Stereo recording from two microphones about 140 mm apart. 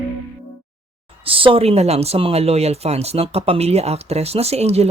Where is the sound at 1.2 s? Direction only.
40° right (ahead or behind).